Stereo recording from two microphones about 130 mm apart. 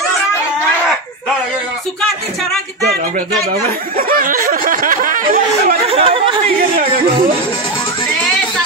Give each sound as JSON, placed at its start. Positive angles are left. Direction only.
{"t": 4.2, "sound": "snicker", "side_deg": -90}
{"t": 5.9, "sound": "speech", "side_deg": -45}